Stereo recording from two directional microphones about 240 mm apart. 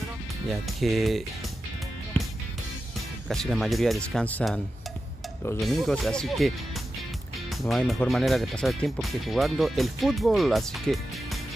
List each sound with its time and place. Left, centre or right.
0.5 s speech: centre
2.1 s music: centre
3.3 s speech: centre
7.6 s speech: centre